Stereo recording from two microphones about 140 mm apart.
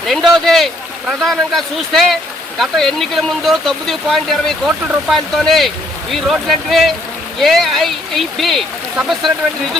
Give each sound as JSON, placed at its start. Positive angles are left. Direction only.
{"t": 0.1, "sound": "speech", "side_deg": 0}